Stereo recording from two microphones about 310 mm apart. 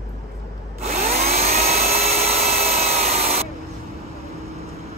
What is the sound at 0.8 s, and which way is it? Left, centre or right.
Tools, right.